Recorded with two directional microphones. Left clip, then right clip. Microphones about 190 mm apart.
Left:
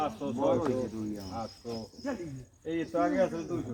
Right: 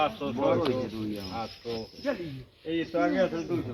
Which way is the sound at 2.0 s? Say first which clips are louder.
Right 6 dB; 10° left (ahead or behind).